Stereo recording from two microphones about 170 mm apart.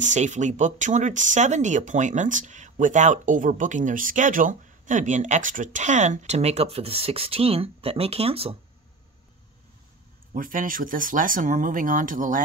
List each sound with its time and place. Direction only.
0.0 s speech: 45° right (ahead or behind)
10.3 s speech: 55° right (ahead or behind)